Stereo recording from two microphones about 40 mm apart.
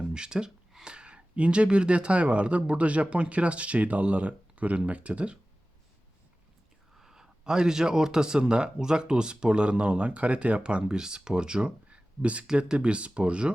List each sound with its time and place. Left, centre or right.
0.1 s a sound: centre
0.9 s speech: right
6.9 s speech: centre